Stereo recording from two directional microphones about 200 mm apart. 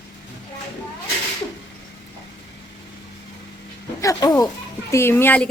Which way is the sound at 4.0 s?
15° left (ahead or behind).